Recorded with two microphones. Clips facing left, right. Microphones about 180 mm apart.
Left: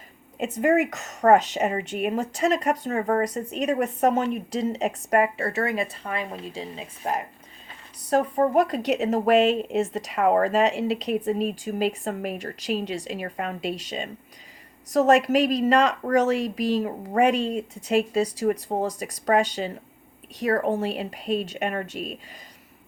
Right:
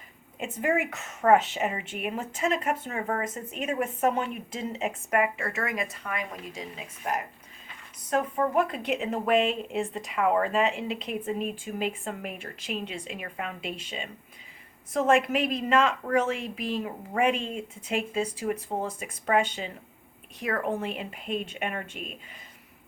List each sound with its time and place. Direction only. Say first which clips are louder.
0.3 s a woman's voice: left 6 dB; 40° left (ahead or behind)